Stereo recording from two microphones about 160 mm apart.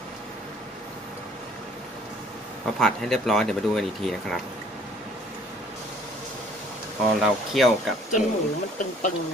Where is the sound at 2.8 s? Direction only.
5° left (ahead or behind).